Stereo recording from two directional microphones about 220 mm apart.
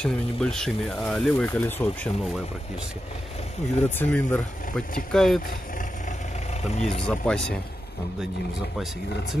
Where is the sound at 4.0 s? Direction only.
5° left (ahead or behind).